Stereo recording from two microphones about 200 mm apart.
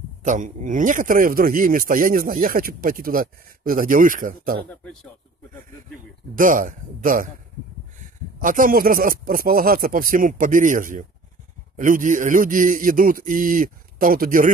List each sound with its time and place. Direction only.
0.2 s a man's voice: 40° right (ahead or behind)
5.9 s a man's voice: 40° right (ahead or behind)
8.4 s a man's voice: 45° right (ahead or behind)